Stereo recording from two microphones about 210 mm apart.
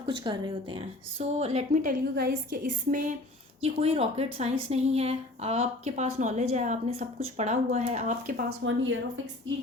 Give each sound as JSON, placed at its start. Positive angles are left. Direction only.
{"t": 0.0, "sound": "a woman's voice", "side_deg": -25}
{"t": 1.8, "sound": "speech", "side_deg": -45}
{"t": 3.6, "sound": "a woman's voice", "side_deg": -30}
{"t": 8.6, "sound": "speech", "side_deg": -65}